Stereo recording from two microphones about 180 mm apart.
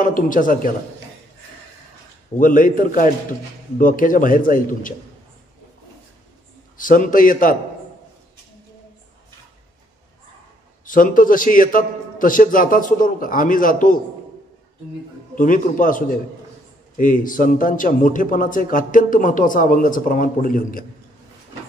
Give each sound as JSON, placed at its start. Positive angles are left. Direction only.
{"t": 0.0, "sound": "a man's voice", "side_deg": 50}
{"t": 2.3, "sound": "a man's voice", "side_deg": 50}
{"t": 6.8, "sound": "a man's voice", "side_deg": 50}
{"t": 10.9, "sound": "a man's voice", "side_deg": 50}
{"t": 15.3, "sound": "a man's voice", "side_deg": 50}